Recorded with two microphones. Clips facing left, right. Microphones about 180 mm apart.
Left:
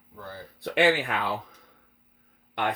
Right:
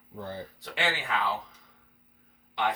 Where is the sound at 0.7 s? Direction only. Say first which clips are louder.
Left 7 dB; 60° left (ahead or behind).